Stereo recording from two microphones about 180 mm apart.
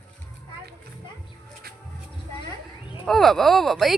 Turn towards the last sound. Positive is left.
turn(degrees=0)  # may be behind; listen again after turning